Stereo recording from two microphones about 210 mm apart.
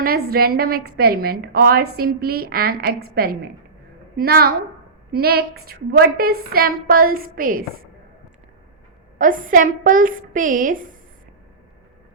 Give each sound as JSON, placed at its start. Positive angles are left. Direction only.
{"t": 0.0, "sound": "a woman's voice", "side_deg": -45}
{"t": 9.1, "sound": "a woman's voice", "side_deg": -40}